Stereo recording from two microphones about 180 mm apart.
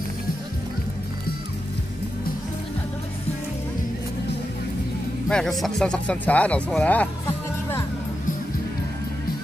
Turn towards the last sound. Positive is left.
turn(degrees=15)  # may be behind; listen again after turning